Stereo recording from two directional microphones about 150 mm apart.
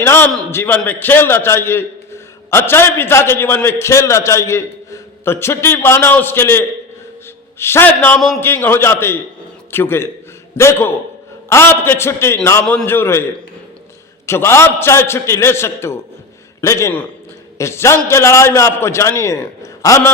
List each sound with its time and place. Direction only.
0.0 s a man's voice: 15° left (ahead or behind)
14.3 s a man's voice: 15° left (ahead or behind)